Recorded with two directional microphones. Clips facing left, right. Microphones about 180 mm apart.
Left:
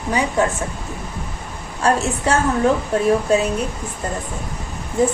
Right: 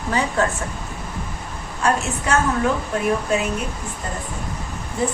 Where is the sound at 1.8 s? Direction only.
35° left (ahead or behind).